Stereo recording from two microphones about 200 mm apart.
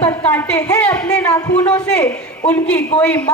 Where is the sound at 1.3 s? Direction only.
20° left (ahead or behind).